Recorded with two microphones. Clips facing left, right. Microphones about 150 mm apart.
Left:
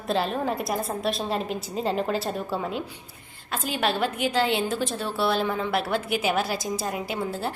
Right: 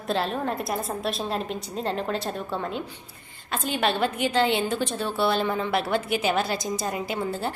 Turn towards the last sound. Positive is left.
turn(degrees=0)  # may be behind; listen again after turning